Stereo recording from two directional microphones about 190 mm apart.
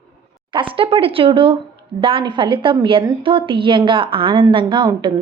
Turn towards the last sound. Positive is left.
turn(degrees=-25)  # may be behind; listen again after turning